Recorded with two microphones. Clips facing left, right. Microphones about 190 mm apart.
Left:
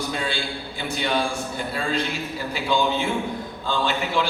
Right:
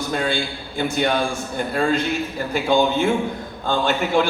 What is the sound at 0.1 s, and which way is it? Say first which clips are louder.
A man's voice: right 5 dB; 50° right (ahead or behind).